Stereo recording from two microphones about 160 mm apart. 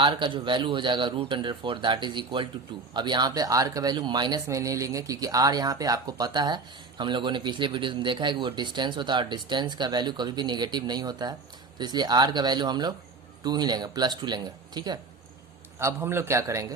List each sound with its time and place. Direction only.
0.0 s speech: 30° right (ahead or behind)
15.8 s a man's voice: 15° right (ahead or behind)